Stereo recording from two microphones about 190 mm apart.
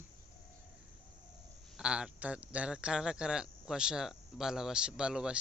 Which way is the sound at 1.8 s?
5° right (ahead or behind).